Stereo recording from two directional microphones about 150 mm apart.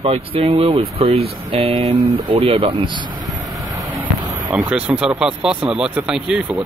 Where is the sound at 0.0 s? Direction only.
40° right (ahead or behind).